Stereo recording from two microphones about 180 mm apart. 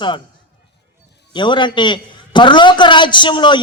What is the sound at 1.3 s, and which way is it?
A man's voice, 25° left (ahead or behind).